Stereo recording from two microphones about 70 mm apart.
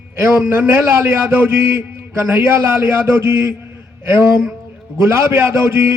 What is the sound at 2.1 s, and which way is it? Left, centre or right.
A man's voice, right.